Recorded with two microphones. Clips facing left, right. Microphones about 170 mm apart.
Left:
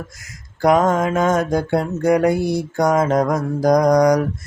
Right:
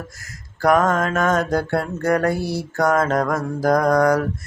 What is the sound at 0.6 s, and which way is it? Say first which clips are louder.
Mantra: left 2 dB; 20° left (ahead or behind).